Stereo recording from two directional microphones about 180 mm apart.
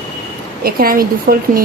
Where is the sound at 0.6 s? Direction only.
55° right (ahead or behind).